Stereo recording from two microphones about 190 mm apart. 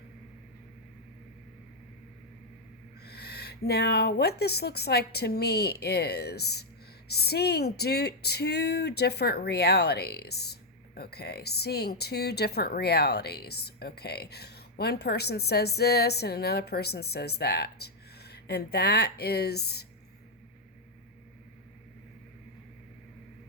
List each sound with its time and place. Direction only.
3.0 s speech: 55° left (ahead or behind)